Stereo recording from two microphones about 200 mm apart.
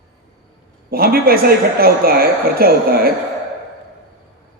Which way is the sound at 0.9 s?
50° right (ahead or behind).